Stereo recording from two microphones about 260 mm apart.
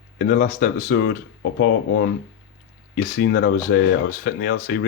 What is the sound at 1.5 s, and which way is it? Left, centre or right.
Speech, left.